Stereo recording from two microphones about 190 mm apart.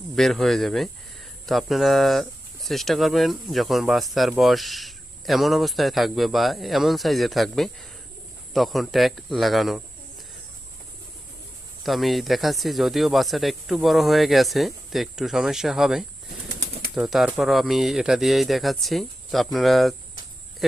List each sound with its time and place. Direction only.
0.2 s speech: centre (ahead or behind)
11.8 s speech: centre (ahead or behind)
16.5 s bird flight: 65° right (ahead or behind)
16.9 s speech: centre (ahead or behind)